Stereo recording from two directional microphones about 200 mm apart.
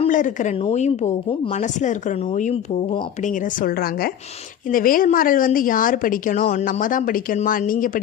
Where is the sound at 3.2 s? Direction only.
40° left (ahead or behind).